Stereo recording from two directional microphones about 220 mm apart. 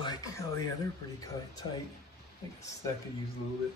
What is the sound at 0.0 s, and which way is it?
Radio, 15° left (ahead or behind).